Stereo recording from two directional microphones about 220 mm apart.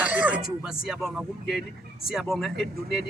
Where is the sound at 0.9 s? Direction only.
Centre (ahead or behind).